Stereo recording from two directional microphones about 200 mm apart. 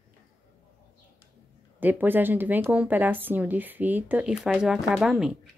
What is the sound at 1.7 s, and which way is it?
Speech, 10° right (ahead or behind).